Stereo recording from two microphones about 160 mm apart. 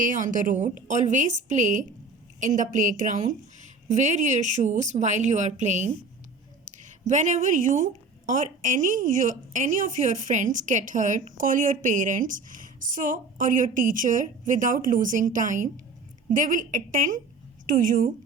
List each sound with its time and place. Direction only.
0.0 s a woman's voice: 55° right (ahead or behind)
7.0 s a woman's voice: 50° right (ahead or behind)